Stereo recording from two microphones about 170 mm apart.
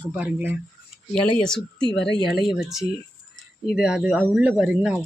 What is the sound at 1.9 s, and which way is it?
Speech, 90° left.